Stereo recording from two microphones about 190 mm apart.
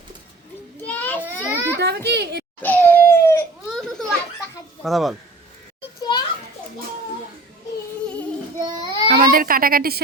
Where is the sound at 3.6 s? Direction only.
5° left (ahead or behind).